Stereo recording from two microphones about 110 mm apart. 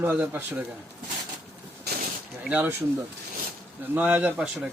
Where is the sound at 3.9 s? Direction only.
15° right (ahead or behind).